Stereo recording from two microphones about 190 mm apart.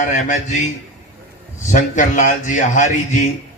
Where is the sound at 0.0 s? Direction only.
40° left (ahead or behind).